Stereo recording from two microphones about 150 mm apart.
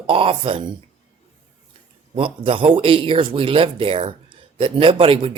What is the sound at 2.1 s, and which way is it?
Speech, 35° right (ahead or behind).